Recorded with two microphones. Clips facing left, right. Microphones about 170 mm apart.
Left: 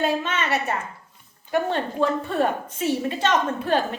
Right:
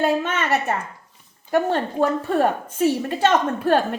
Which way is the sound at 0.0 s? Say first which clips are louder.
Right 3 dB; 50° right (ahead or behind).